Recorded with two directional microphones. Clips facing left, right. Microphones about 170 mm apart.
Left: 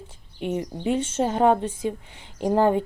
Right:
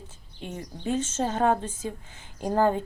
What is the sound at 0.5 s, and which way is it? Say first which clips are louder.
Speech: left 3 dB; 15° left (ahead or behind).